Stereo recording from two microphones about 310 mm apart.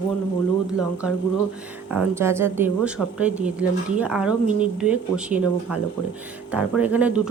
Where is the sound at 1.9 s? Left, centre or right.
Centre.